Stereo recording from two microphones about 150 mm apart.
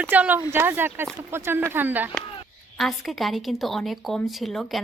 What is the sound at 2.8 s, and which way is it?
A woman's voice, centre (ahead or behind).